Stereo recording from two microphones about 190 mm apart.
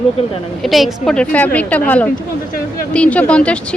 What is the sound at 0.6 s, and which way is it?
A woman's voice, centre (ahead or behind).